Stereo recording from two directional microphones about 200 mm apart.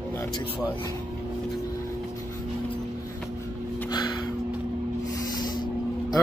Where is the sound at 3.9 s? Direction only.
20° left (ahead or behind).